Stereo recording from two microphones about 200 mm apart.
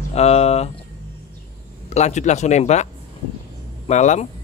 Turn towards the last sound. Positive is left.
turn(degrees=35)  # may be behind; listen again after turning